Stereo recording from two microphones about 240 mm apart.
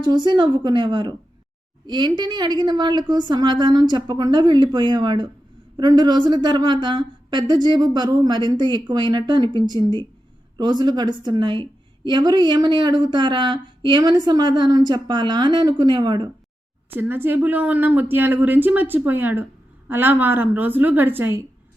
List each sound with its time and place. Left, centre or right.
0.0 s a woman's voice: centre